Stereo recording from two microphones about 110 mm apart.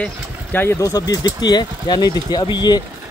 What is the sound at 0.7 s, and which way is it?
Speech, 30° left (ahead or behind).